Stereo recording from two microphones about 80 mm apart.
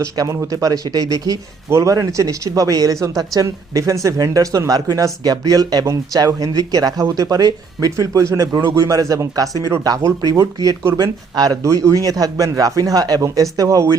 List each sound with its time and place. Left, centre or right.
0.0 s speech: right
11.6 s speech: right